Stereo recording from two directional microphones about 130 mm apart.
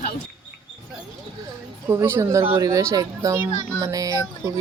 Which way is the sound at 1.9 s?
20° right (ahead or behind).